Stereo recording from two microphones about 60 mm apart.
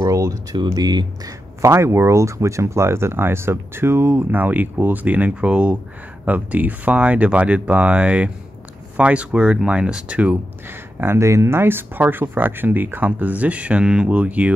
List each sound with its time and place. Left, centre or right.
0.0 s speech: right
1.7 s speech: right
4.3 s speech: right
10.7 s speech: right
11.1 s speech: right